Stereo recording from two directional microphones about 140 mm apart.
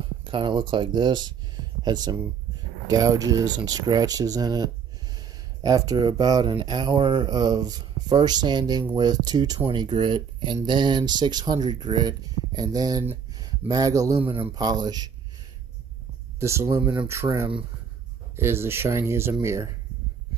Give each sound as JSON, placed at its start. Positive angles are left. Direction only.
{"t": 0.2, "sound": "speech", "side_deg": -35}
{"t": 16.3, "sound": "speech", "side_deg": -20}
{"t": 18.3, "sound": "speech", "side_deg": -15}